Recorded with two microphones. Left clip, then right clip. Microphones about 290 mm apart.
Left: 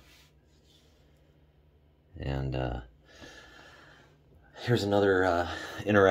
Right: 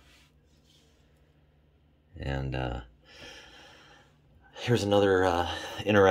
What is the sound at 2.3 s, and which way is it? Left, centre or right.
Speech, centre.